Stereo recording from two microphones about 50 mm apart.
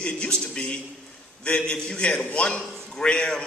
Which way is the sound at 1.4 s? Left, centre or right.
Centre.